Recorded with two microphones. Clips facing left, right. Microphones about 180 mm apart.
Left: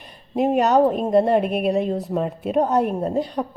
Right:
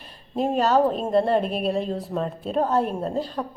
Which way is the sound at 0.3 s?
20° left (ahead or behind).